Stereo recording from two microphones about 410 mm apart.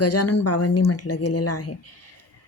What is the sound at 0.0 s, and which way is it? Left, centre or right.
Speech, left.